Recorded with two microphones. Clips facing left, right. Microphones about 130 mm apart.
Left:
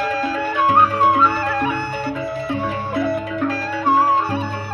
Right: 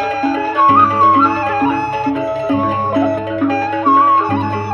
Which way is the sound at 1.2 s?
40° right (ahead or behind).